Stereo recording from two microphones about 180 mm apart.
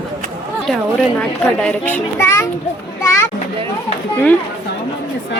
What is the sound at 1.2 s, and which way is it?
A child's voice, 5° left (ahead or behind).